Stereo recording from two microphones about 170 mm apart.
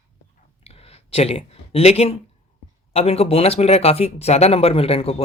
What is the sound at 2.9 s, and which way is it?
Speech, 35° left (ahead or behind).